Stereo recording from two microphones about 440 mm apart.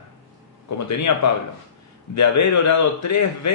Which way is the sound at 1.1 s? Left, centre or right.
Left.